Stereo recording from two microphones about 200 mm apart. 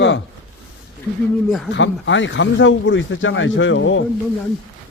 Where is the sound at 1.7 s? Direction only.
65° left (ahead or behind).